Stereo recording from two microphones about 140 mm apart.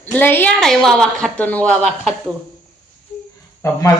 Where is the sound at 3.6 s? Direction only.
20° left (ahead or behind).